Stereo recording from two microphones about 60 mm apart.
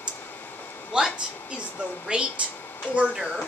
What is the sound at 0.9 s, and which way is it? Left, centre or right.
Speech, centre.